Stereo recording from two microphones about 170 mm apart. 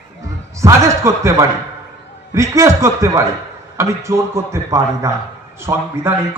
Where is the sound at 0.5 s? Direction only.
20° right (ahead or behind).